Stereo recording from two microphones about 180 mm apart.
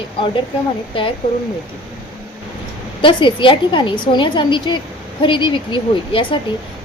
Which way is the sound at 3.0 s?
30° left (ahead or behind).